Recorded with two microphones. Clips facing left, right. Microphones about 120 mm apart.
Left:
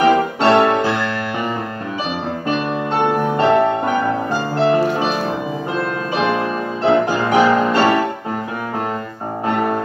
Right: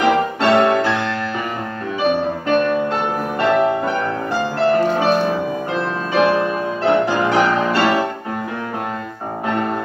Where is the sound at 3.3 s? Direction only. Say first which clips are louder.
Even; 30° left (ahead or behind).